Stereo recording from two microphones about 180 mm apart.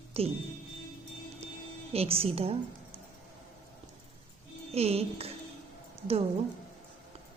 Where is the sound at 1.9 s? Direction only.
35° right (ahead or behind).